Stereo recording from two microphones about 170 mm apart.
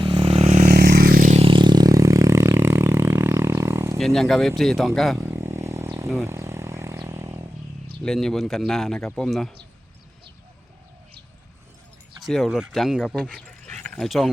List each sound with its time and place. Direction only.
0.0 s vehicle: 30° right (ahead or behind); by 1.3 s 60° right (ahead or behind)
1.3 s vehicle: 35° right (ahead or behind); by 3.9 s 15° right (ahead or behind)
3.9 s speech: centre (ahead or behind)
5.1 s vehicle: 15° right (ahead or behind)
8.0 s speech: centre (ahead or behind)
12.2 s speech: centre (ahead or behind)